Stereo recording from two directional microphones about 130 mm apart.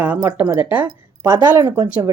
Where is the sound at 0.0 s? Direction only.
15° right (ahead or behind).